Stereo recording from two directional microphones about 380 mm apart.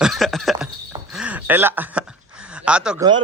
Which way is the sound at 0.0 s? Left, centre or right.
Centre.